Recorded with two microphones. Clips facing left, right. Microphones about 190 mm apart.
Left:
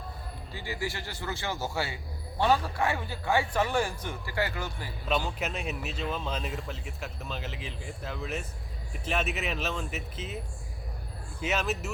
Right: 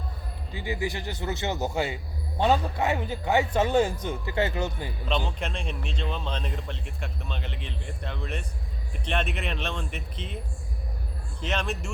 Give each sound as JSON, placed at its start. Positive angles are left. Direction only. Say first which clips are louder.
{"t": 0.5, "sound": "a man's voice", "louder": "right 5 dB", "side_deg": -20}
{"t": 5.4, "sound": "speech", "louder": "even", "side_deg": 5}